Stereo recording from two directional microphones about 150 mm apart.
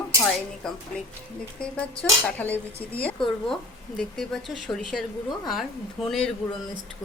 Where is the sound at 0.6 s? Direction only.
5° left (ahead or behind).